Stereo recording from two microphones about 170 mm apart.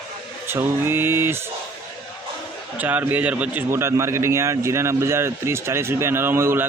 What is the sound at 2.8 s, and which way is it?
A man's voice, 10° right (ahead or behind).